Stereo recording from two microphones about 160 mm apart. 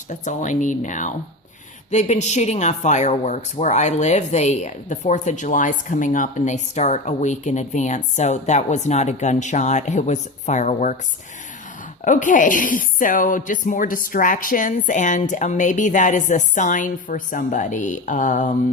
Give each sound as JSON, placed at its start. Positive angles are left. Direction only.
{"t": 0.1, "sound": "speech", "side_deg": 50}
{"t": 12.0, "sound": "speech", "side_deg": 50}